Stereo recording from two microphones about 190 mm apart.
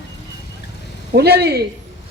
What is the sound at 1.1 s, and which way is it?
Speech, 60° right (ahead or behind).